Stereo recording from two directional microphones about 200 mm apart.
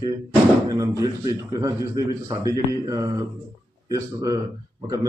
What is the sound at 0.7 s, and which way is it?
A man's voice, 15° right (ahead or behind).